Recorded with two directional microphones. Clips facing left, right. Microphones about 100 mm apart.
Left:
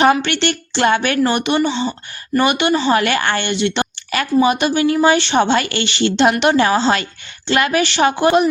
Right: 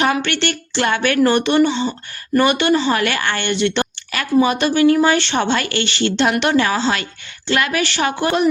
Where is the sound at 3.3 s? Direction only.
15° left (ahead or behind).